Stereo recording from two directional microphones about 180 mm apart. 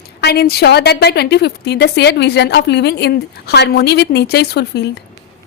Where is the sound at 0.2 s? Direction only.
60° left (ahead or behind).